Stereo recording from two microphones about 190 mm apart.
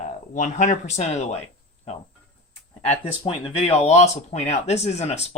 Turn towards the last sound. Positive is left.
turn(degrees=35)  # may be behind; listen again after turning